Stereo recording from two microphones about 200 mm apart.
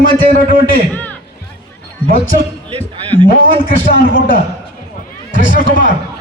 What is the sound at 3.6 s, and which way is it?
Speech, 45° left (ahead or behind).